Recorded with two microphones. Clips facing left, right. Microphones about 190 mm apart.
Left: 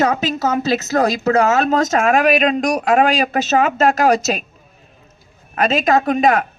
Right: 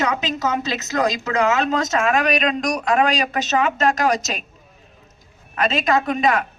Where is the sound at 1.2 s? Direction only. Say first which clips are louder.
Left 5 dB; 40° left (ahead or behind).